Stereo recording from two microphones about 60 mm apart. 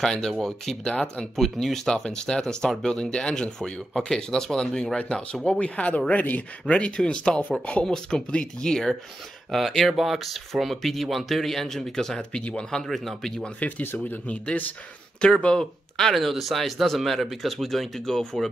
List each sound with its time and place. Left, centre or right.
0.0 s speech: centre
0.9 s speech: centre
1.3 s speech: centre
4.9 s speech: centre
13.4 s speech: left
15.4 s speech: centre